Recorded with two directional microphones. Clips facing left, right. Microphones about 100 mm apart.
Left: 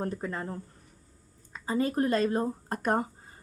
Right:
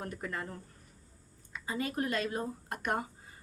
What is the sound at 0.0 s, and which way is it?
Speech, 30° left (ahead or behind).